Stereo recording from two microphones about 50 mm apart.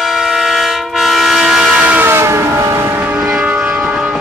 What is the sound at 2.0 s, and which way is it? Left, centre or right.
Vehicle, right.